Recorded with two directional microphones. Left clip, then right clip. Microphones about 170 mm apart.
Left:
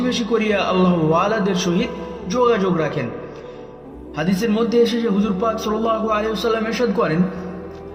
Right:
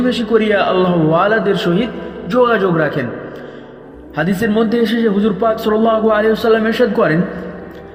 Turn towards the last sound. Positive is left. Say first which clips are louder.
# right 6 dB
turn(degrees=-35)  # may be behind; listen again after turning